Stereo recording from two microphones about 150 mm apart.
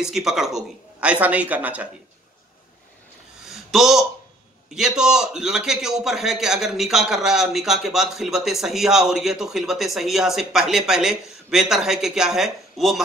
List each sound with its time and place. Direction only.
0.0 s speech: 5° right (ahead or behind)
3.4 s a sound: centre (ahead or behind)
4.6 s a man's voice: 5° right (ahead or behind)